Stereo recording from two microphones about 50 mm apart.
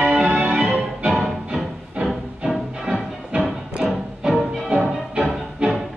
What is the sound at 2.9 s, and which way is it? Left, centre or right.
Music, right.